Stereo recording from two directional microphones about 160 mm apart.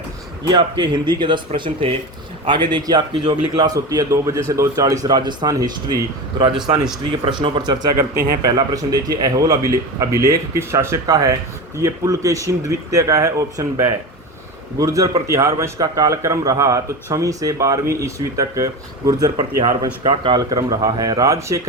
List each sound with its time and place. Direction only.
0.4 s a man's voice: 30° right (ahead or behind)
7.3 s a man's voice: 30° right (ahead or behind)
8.1 s a man's voice: 75° right (ahead or behind)
8.4 s a man's voice: 25° right (ahead or behind)